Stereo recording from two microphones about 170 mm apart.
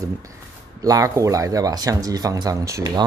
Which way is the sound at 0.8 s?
20° right (ahead or behind).